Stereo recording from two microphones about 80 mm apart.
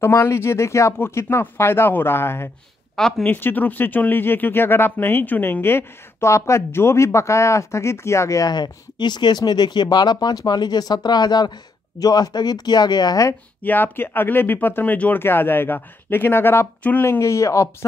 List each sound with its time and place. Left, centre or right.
0.0 s speech: left
3.0 s speech: centre
3.3 s speech: left
8.5 s speech: left
13.6 s speech: left